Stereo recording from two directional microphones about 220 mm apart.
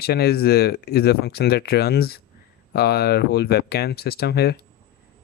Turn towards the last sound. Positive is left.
turn(degrees=45)  # may be behind; listen again after turning